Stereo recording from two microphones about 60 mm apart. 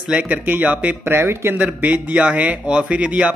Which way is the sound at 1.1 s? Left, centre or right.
Right.